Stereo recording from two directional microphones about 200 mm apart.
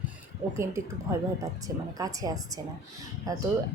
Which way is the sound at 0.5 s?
15° right (ahead or behind).